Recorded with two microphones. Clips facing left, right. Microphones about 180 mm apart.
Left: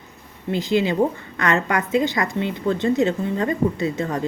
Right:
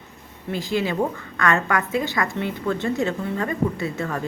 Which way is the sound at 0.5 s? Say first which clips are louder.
Left 4 dB; 20° left (ahead or behind).